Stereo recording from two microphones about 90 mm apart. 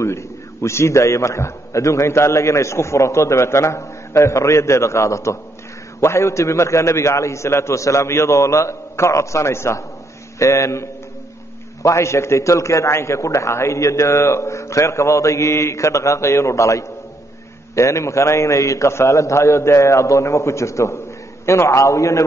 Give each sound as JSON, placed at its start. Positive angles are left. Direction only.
{"t": 0.0, "sound": "a man's voice", "side_deg": 30}